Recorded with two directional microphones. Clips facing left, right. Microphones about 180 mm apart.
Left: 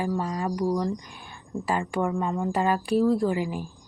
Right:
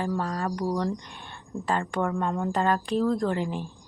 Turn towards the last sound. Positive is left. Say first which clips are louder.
# left 1 dB
turn(degrees=5)  # may be behind; listen again after turning